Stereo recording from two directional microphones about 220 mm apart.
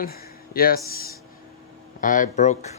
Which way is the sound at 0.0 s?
45° left (ahead or behind).